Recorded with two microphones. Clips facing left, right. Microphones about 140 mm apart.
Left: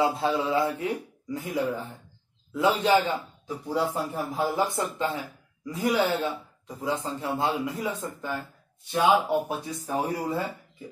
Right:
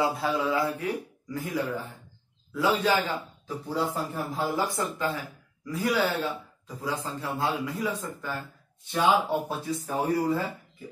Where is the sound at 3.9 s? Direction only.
10° left (ahead or behind).